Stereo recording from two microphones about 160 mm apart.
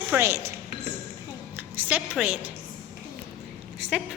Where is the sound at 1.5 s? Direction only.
10° right (ahead or behind).